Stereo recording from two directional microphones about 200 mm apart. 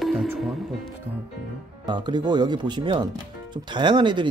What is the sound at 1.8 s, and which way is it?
Speech, 20° right (ahead or behind).